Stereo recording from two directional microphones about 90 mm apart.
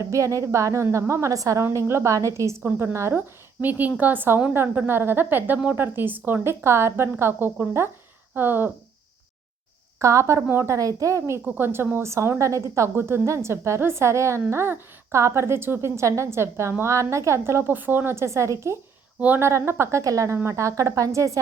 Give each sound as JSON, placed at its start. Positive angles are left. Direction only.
{"t": 0.0, "sound": "a woman's voice", "side_deg": -35}
{"t": 1.6, "sound": "a woman's voice", "side_deg": -30}
{"t": 10.0, "sound": "a woman's voice", "side_deg": -35}
{"t": 11.4, "sound": "a woman's voice", "side_deg": -20}